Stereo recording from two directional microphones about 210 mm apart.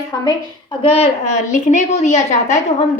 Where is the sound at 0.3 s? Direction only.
20° left (ahead or behind).